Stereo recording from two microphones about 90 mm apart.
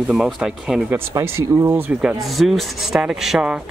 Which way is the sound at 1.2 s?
30° right (ahead or behind).